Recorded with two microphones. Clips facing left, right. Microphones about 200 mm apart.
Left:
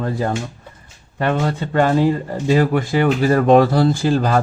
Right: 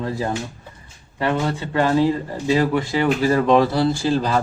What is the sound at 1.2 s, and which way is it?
Speech, 50° left (ahead or behind).